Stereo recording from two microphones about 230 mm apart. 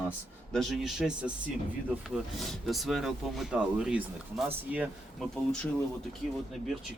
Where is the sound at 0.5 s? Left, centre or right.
Centre.